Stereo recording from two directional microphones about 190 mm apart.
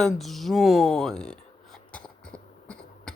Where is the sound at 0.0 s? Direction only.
Centre (ahead or behind).